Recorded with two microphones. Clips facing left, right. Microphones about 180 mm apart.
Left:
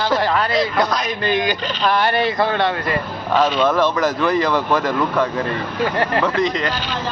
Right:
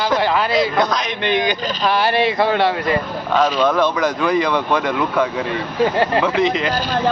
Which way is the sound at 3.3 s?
5° left (ahead or behind).